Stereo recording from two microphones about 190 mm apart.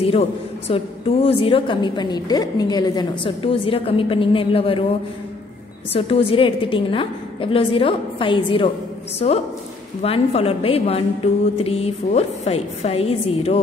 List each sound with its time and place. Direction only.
0.0 s a woman's voice: 30° left (ahead or behind)
5.9 s a woman's voice: 30° left (ahead or behind)